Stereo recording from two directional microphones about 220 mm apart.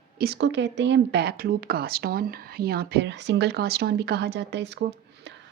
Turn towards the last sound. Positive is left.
turn(degrees=-50)  # may be behind; listen again after turning